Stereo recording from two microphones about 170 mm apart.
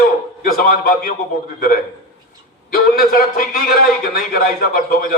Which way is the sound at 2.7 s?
60° left (ahead or behind).